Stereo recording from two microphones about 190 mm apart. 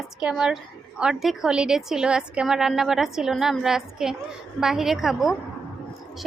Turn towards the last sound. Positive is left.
turn(degrees=0)  # may be behind; listen again after turning